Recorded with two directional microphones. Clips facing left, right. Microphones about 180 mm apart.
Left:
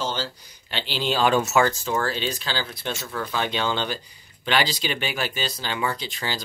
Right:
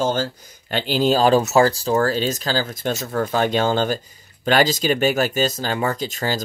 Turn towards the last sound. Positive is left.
turn(degrees=-45)  # may be behind; listen again after turning